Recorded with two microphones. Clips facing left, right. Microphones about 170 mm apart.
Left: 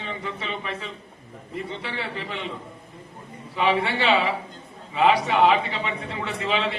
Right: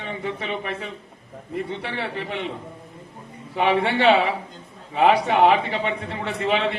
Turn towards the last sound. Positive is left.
turn(degrees=-55)  # may be behind; listen again after turning